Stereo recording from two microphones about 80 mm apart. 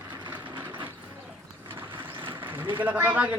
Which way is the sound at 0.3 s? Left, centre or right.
Right.